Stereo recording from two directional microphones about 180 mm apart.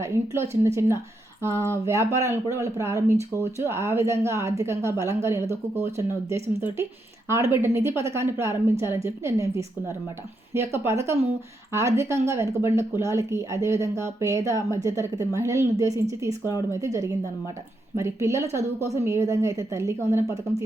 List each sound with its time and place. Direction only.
0.0 s speech: 15° right (ahead or behind)